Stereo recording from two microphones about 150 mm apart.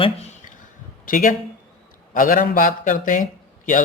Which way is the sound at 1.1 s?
60° left (ahead or behind).